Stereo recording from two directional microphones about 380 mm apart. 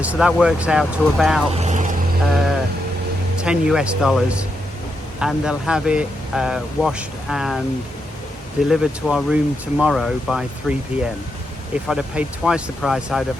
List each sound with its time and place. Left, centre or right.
0.0 s speech: centre
1.5 s vehicle: centre
3.4 s speech: centre
8.6 s speech: centre